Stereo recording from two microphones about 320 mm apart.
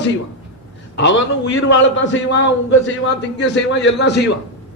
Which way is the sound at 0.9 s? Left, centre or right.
Left.